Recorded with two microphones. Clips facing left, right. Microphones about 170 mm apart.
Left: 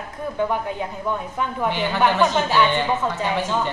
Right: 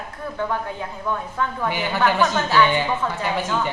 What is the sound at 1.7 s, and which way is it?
Speech, 5° right (ahead or behind).